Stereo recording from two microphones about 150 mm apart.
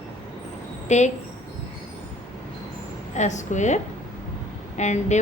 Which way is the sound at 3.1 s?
55° left (ahead or behind).